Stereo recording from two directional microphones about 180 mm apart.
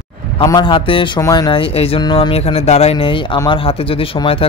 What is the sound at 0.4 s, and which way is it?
Speech, 25° left (ahead or behind).